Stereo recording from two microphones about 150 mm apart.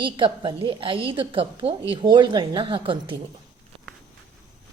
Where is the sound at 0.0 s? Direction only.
35° right (ahead or behind).